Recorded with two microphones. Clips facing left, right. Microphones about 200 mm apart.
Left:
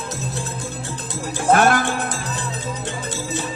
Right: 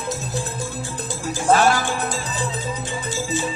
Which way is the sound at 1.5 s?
55° left (ahead or behind).